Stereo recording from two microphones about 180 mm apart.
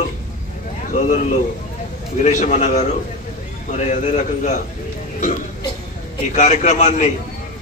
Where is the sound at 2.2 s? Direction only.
45° left (ahead or behind).